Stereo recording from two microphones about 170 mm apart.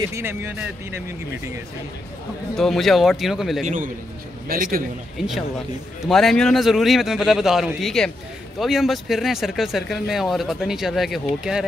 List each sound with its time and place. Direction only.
0.1 s speech: 15° right (ahead or behind)
2.5 s speech: centre (ahead or behind)
3.6 s a man's voice: 50° right (ahead or behind)
6.0 s speech: centre (ahead or behind)